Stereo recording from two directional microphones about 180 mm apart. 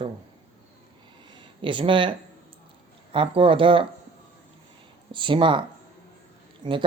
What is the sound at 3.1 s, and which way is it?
Speech, 30° right (ahead or behind).